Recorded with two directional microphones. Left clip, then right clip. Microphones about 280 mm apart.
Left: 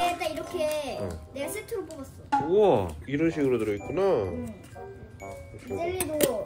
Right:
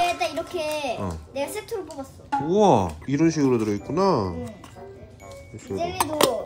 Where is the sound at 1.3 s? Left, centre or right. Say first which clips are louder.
Right 4 dB; centre.